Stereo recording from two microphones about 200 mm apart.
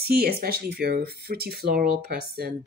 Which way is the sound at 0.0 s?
50° right (ahead or behind).